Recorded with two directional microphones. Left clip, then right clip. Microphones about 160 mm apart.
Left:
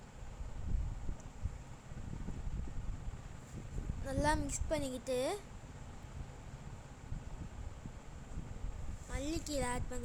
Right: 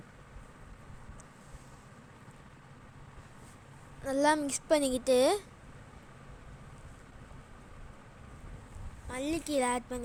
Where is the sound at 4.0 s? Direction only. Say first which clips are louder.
Right 8 dB; 20° right (ahead or behind).